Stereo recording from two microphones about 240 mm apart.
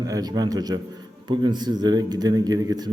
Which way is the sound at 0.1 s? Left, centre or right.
Centre.